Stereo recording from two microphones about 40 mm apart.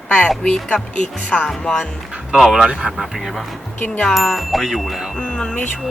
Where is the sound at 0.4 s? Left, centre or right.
Left.